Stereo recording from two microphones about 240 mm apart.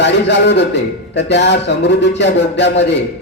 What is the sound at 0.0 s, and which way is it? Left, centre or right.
A man's voice, left.